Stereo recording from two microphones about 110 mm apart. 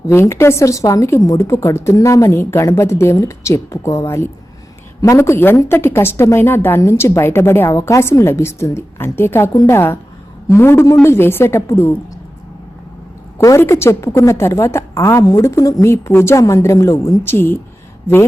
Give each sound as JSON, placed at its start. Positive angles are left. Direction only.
{"t": 0.1, "sound": "a woman's voice", "side_deg": 25}
{"t": 13.4, "sound": "a woman's voice", "side_deg": 25}